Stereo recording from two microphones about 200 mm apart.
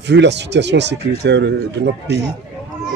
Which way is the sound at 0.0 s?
60° right (ahead or behind).